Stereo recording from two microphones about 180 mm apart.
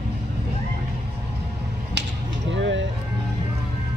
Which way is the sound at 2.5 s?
90° right.